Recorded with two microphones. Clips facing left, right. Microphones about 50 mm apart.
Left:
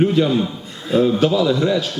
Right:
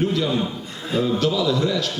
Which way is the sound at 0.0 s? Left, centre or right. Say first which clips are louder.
Left 6 dB; left.